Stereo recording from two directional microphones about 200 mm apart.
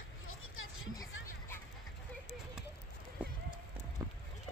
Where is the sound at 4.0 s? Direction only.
15° right (ahead or behind).